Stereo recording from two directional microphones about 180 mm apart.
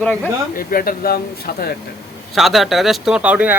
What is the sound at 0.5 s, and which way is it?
Speech, 55° left (ahead or behind).